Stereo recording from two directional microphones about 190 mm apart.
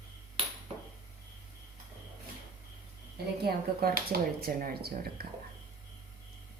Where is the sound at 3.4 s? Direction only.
55° right (ahead or behind).